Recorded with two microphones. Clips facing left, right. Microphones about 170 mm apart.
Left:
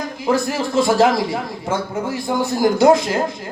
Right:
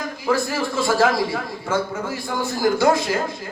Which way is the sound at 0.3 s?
20° left (ahead or behind).